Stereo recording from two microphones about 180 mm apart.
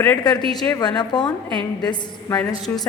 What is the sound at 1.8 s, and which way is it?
Speech, 25° left (ahead or behind).